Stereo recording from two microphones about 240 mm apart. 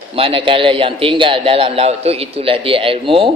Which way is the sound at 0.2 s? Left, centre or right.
Right.